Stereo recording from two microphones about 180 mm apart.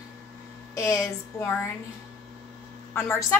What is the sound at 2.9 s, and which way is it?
Speech, 15° left (ahead or behind).